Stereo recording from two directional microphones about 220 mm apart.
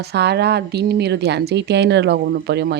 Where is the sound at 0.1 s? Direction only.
50° right (ahead or behind).